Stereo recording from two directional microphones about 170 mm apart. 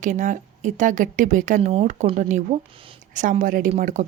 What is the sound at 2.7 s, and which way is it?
Speech, 30° right (ahead or behind).